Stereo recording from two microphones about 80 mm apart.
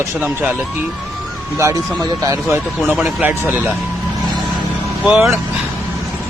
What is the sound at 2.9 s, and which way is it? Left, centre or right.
Speech, centre.